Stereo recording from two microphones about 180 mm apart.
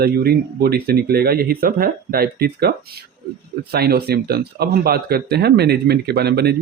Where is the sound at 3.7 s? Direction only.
60° right (ahead or behind).